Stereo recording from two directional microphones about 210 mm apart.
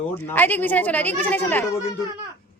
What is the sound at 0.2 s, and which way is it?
Speech, 10° left (ahead or behind).